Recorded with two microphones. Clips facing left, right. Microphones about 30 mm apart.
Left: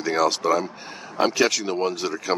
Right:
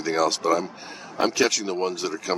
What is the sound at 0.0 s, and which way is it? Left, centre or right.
Speech, centre.